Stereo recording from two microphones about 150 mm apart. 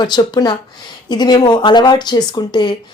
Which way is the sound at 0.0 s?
30° left (ahead or behind).